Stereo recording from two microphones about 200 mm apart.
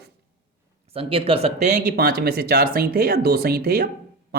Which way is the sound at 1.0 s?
25° right (ahead or behind).